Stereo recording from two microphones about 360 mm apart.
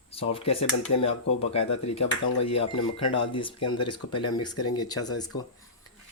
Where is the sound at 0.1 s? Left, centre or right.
Centre.